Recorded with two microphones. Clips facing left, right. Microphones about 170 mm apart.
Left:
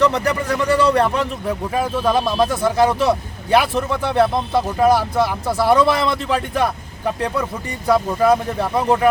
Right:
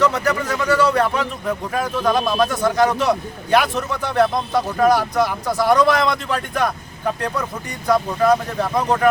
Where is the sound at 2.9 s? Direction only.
30° left (ahead or behind).